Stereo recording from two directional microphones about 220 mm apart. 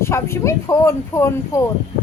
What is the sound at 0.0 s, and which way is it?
Speech, 10° left (ahead or behind).